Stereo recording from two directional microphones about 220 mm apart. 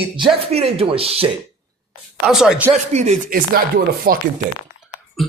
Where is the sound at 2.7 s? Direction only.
30° right (ahead or behind).